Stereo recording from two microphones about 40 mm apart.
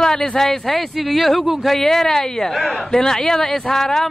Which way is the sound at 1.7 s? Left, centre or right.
Centre.